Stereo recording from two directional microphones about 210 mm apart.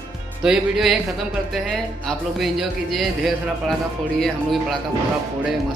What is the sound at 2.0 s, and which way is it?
A man's voice, centre (ahead or behind).